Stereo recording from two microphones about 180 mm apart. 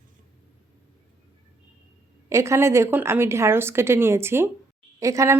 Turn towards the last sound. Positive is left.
turn(degrees=-15)  # may be behind; listen again after turning